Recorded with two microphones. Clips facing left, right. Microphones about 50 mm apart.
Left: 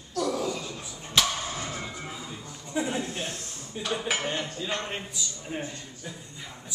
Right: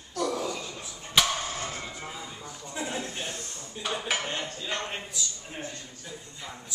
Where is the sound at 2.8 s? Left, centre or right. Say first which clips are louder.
Left 4 dB; centre.